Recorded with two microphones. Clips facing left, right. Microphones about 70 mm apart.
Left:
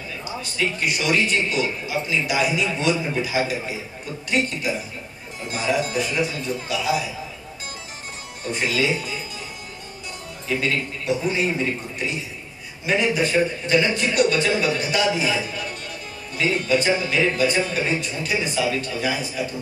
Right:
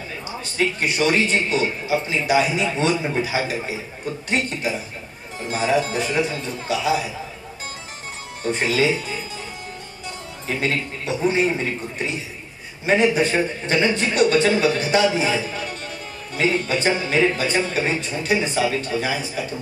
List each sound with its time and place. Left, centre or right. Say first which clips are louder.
0.6 s a man's voice: right 3 dB; right
5.5 s a man's voice: right 3 dB; right
8.5 s a man's voice: right 3 dB; right
10.5 s a man's voice: even; right
12.8 s a man's voice: right 3 dB; right